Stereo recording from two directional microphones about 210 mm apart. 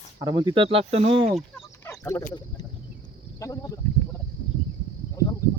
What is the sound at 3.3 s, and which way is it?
Speech, 15° left (ahead or behind).